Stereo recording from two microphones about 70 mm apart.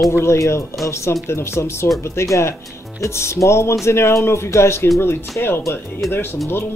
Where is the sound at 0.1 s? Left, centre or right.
Left.